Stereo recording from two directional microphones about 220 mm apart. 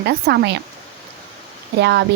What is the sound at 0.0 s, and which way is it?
Speech, 50° right (ahead or behind).